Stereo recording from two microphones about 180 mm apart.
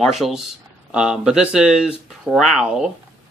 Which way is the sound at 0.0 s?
Centre (ahead or behind).